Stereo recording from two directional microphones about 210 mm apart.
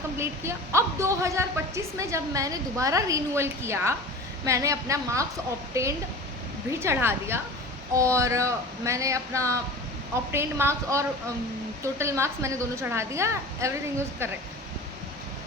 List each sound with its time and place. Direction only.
0.2 s a woman's voice: 15° right (ahead or behind)